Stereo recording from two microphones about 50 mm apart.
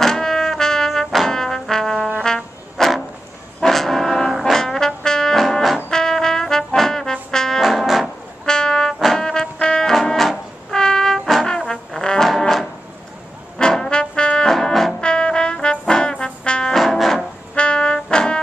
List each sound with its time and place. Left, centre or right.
0.0 s trombone: centre
3.6 s brass instrument: centre
5.9 s trombone: centre
7.6 s music: centre
8.5 s music: centre
10.8 s trumpet: centre
11.1 s trombone: centre
11.4 s trombone: centre
14.5 s brass instrument: centre
15.0 s trombone: centre
16.7 s music: centre
17.6 s music: centre
18.1 s brass instrument: centre